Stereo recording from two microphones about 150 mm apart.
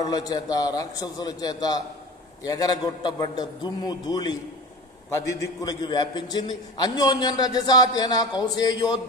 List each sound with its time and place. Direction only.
0.1 s a man's voice: 25° left (ahead or behind)